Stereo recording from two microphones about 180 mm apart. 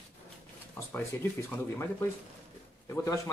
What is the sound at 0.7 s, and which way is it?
Speech, 10° left (ahead or behind).